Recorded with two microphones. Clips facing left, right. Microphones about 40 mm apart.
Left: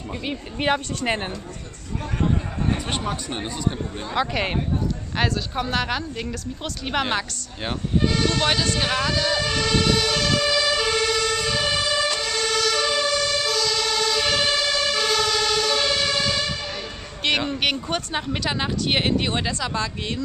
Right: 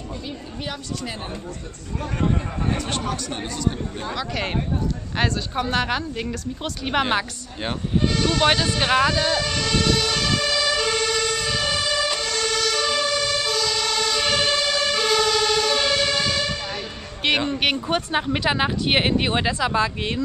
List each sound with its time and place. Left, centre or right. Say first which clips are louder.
0.3 s a woman's voice: left 12 dB; left
3.1 s speech: even; centre
5.1 s a woman's voice: right 1 dB; centre
9.4 s emergency vehicle: left 1 dB; centre
17.2 s a woman's voice: right 1 dB; centre